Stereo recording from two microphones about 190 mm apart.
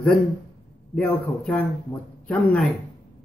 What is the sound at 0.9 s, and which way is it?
A man's voice, 10° left (ahead or behind).